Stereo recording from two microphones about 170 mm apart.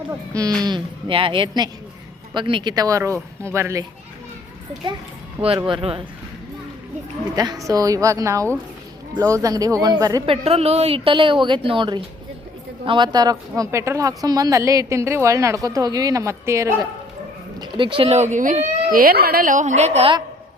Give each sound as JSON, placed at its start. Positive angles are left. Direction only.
{"t": 0.6, "sound": "speech", "side_deg": -25}
{"t": 5.5, "sound": "speech", "side_deg": -30}
{"t": 7.6, "sound": "speech", "side_deg": -20}
{"t": 10.2, "sound": "a woman's voice", "side_deg": -35}
{"t": 17.6, "sound": "speech", "side_deg": -25}